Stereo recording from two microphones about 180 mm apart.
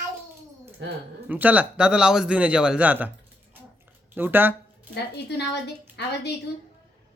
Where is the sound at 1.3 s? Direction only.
10° right (ahead or behind).